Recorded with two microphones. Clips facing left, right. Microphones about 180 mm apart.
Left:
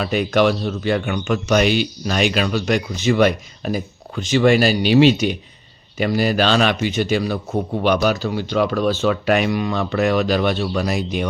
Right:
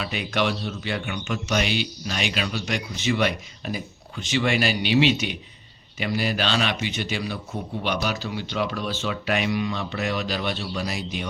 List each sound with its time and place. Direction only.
0.0 s a man's voice: 45° left (ahead or behind)